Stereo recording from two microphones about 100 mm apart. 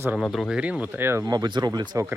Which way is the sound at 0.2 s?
Centre (ahead or behind).